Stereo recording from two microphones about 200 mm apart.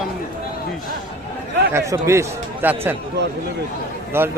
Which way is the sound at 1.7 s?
15° right (ahead or behind).